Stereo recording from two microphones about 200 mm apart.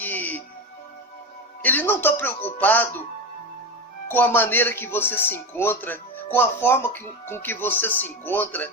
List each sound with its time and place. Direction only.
0.0 s music: 10° left (ahead or behind)
1.6 s speech: 10° left (ahead or behind)
4.1 s speech: 10° left (ahead or behind)